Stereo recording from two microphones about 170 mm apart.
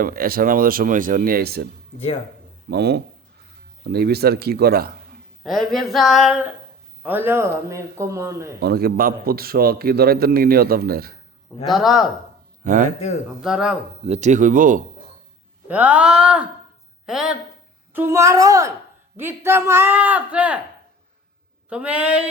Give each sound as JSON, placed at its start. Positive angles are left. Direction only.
{"t": 0.0, "sound": "a man's voice", "side_deg": -60}
{"t": 2.6, "sound": "speech", "side_deg": -75}
{"t": 5.4, "sound": "speech", "side_deg": 0}
{"t": 8.6, "sound": "a man's voice", "side_deg": -65}
{"t": 11.7, "sound": "speech", "side_deg": 0}
{"t": 12.6, "sound": "speech", "side_deg": -50}
{"t": 13.4, "sound": "speech", "side_deg": -5}
{"t": 14.0, "sound": "speech", "side_deg": -40}
{"t": 15.6, "sound": "speech", "side_deg": -10}
{"t": 17.9, "sound": "speech", "side_deg": -15}
{"t": 21.7, "sound": "speech", "side_deg": -5}